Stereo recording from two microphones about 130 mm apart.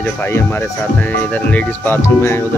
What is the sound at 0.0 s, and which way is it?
Speech, 15° left (ahead or behind).